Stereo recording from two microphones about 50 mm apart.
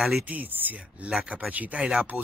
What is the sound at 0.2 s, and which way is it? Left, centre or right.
Speech, right.